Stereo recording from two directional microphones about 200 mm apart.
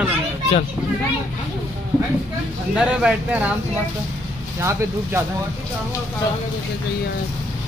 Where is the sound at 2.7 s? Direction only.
5° right (ahead or behind).